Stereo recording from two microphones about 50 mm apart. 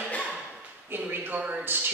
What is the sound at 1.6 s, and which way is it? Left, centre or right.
Speech, right.